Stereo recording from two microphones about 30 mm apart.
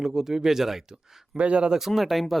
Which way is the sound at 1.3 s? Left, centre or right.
Right.